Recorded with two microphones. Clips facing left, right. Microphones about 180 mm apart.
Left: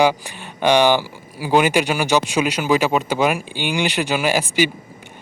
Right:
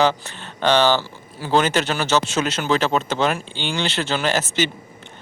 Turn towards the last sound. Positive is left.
turn(degrees=10)  # may be behind; listen again after turning